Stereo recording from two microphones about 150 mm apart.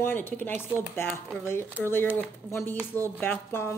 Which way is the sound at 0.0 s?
15° left (ahead or behind).